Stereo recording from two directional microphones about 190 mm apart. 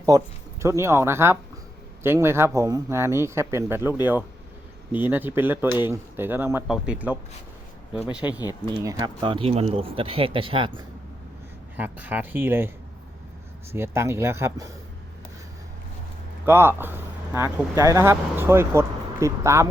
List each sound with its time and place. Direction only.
0.1 s speech: 20° right (ahead or behind)
8.4 s speech: 20° left (ahead or behind)
8.7 s speech: 15° right (ahead or behind)
11.8 s speech: 10° right (ahead or behind)
13.7 s speech: 15° right (ahead or behind)
16.5 s speech: 10° right (ahead or behind)